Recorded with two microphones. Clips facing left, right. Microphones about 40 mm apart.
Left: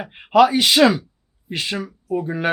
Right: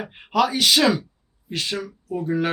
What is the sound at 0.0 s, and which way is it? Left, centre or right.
Speech, centre.